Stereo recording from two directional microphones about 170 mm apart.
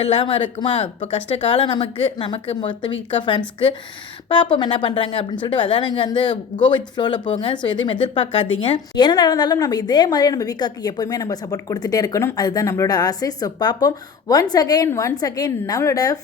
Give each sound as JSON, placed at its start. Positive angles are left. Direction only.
{"t": 0.0, "sound": "a woman's voice", "side_deg": 30}